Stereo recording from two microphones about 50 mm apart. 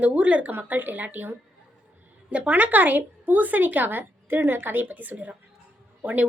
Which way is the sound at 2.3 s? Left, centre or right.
Right.